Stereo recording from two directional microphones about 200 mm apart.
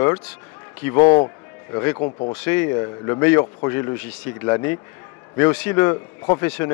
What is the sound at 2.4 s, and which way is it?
Speech, 10° left (ahead or behind).